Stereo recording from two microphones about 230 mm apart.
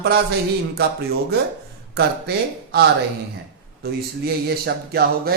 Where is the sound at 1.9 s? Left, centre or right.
Right.